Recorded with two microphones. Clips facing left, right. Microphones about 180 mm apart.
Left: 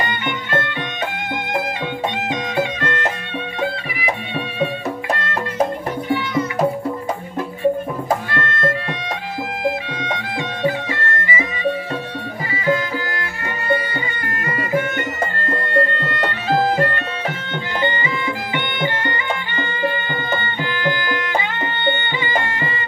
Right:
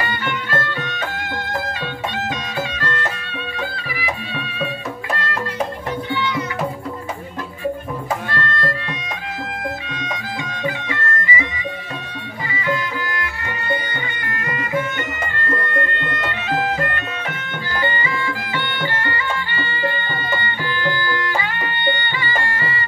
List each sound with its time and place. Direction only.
0.0 s music: 20° left (ahead or behind)
8.4 s music: 25° left (ahead or behind)
9.9 s bagpipes: 25° left (ahead or behind)
12.6 s music: 30° left (ahead or behind)
15.7 s music: 35° left (ahead or behind)
17.7 s music: 20° left (ahead or behind)